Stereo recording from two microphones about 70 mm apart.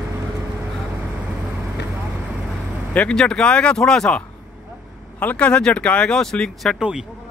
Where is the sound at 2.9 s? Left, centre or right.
Centre.